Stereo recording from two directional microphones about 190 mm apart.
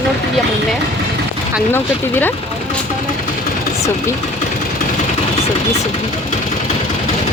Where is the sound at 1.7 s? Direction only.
10° left (ahead or behind).